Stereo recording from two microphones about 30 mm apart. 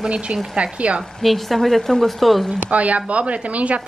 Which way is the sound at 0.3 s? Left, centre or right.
Right.